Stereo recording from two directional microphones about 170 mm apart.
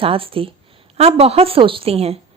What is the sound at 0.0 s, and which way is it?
A woman's voice, 35° right (ahead or behind).